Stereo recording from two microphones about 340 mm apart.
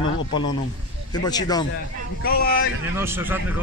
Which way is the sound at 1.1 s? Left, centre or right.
Centre.